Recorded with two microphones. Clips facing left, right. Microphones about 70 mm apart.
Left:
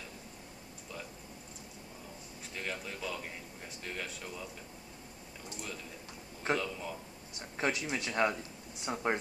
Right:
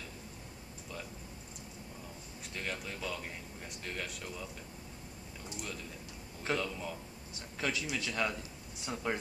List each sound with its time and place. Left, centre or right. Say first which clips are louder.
2.5 s speech: even; centre
6.5 s speech: left 1 dB; centre
7.3 s a man's voice: left 3 dB; left